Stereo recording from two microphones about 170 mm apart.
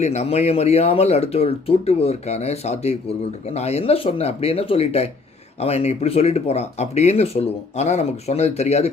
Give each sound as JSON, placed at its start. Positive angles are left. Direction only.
{"t": 0.0, "sound": "speech", "side_deg": 40}